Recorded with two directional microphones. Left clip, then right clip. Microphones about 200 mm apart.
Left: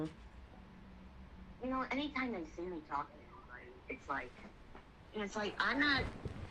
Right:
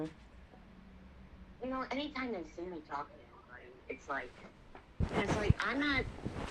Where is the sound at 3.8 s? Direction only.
15° right (ahead or behind).